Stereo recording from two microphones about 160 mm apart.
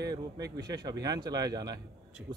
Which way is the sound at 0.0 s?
25° right (ahead or behind).